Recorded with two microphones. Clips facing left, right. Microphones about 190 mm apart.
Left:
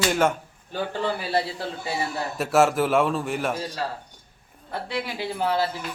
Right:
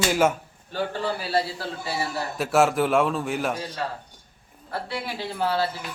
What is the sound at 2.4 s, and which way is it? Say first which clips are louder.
A man's voice: left 1 dB; centre (ahead or behind).